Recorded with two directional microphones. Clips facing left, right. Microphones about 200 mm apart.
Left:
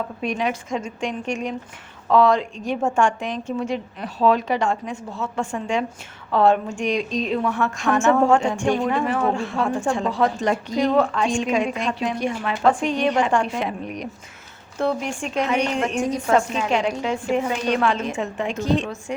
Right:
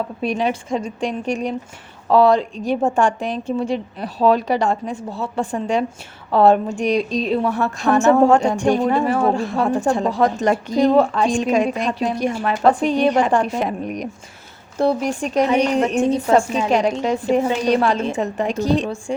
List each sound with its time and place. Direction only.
0.2 s a woman's voice: 35° right (ahead or behind)
16.0 s a woman's voice: 25° right (ahead or behind)